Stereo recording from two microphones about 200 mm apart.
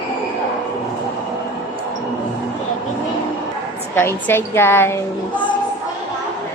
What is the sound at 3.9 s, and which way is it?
A woman's voice, 10° left (ahead or behind).